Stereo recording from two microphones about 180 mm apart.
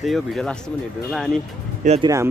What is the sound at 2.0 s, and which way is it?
Speech, 15° right (ahead or behind).